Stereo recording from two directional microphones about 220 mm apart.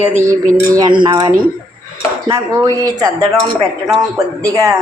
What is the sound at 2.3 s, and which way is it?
A woman's voice, 15° right (ahead or behind).